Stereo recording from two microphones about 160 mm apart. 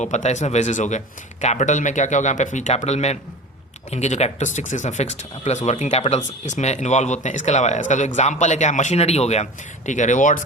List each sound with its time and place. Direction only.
0.0 s speech: 45° left (ahead or behind)